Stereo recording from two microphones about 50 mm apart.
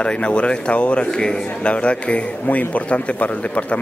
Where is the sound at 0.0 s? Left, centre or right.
Left.